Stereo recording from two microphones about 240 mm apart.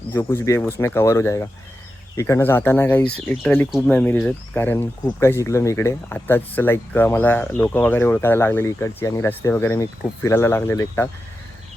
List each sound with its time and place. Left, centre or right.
0.1 s speech: centre